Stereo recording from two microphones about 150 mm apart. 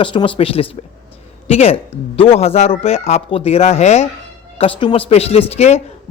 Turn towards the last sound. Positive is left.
turn(degrees=45)  # may be behind; listen again after turning